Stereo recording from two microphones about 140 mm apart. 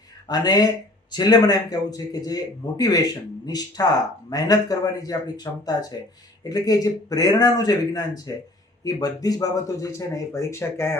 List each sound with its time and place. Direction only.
0.3 s a man's voice: 30° left (ahead or behind)